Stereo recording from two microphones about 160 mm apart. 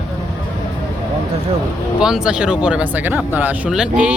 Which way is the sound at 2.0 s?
5° right (ahead or behind).